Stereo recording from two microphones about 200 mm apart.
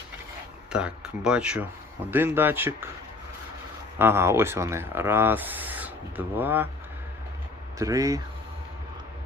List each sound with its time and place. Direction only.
0.7 s speech: 5° right (ahead or behind)
3.9 s speech: 10° right (ahead or behind)
7.8 s speech: 15° right (ahead or behind)